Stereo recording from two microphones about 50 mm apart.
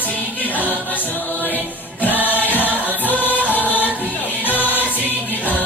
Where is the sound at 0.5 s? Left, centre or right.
Right.